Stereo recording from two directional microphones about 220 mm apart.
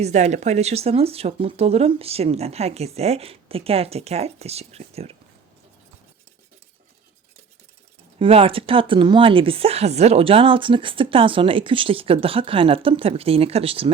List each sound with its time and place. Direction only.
0.0 s speech: 30° right (ahead or behind)
8.2 s speech: 25° right (ahead or behind)